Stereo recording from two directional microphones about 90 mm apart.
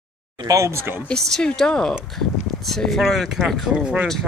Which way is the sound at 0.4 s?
40° right (ahead or behind).